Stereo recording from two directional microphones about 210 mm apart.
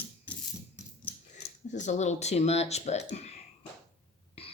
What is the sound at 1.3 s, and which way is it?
Speech, 35° left (ahead or behind).